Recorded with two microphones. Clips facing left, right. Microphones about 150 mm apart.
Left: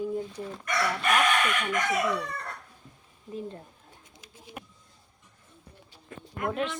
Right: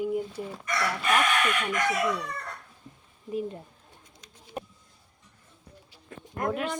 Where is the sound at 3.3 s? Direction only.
15° right (ahead or behind).